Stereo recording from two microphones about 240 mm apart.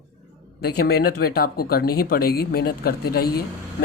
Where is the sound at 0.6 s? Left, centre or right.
Left.